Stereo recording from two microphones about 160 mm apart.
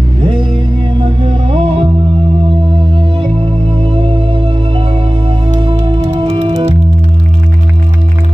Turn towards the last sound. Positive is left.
turn(degrees=-35)  # may be behind; listen again after turning